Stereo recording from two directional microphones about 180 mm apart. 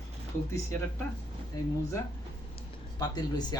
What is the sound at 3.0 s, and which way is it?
Speech, 20° left (ahead or behind).